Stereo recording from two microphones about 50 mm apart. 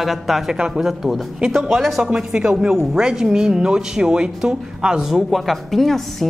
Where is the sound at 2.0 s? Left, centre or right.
Centre.